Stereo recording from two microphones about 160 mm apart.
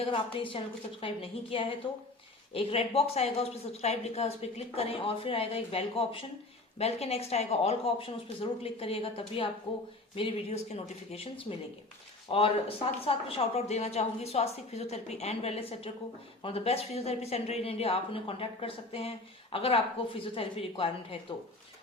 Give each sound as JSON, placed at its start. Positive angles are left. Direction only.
{"t": 0.0, "sound": "speech", "side_deg": 35}